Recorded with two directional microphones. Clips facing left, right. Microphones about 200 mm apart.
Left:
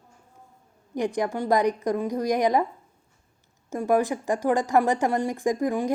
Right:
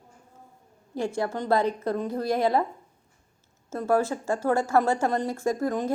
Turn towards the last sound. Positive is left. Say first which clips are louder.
# left 2 dB
turn(degrees=15)  # may be behind; listen again after turning